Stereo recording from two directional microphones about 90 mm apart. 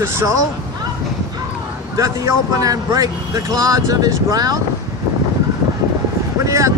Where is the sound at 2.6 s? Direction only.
40° right (ahead or behind).